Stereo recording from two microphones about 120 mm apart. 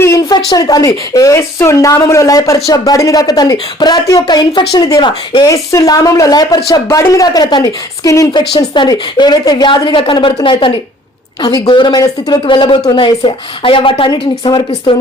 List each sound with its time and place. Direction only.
0.0 s a woman's voice: 30° left (ahead or behind)